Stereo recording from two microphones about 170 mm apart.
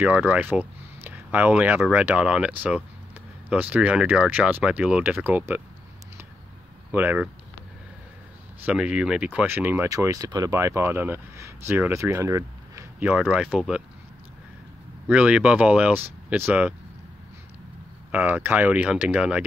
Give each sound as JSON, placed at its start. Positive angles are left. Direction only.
{"t": 0.0, "sound": "speech", "side_deg": -10}
{"t": 6.9, "sound": "speech", "side_deg": -10}
{"t": 8.6, "sound": "speech", "side_deg": -5}
{"t": 15.0, "sound": "speech", "side_deg": -10}
{"t": 18.1, "sound": "speech", "side_deg": -10}